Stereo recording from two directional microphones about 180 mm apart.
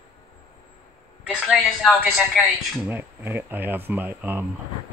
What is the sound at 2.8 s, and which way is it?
Speech, 10° right (ahead or behind).